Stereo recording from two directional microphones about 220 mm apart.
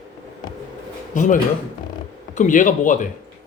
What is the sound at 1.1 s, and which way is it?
Speech, 35° left (ahead or behind).